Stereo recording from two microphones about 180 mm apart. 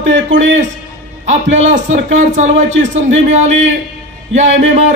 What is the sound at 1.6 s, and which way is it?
Speech, 40° right (ahead or behind).